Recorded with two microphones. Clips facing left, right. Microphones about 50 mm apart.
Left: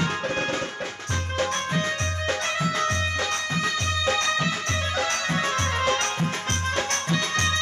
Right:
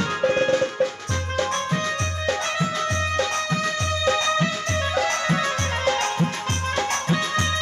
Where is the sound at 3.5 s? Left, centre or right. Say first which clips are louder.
Right 1 dB; centre.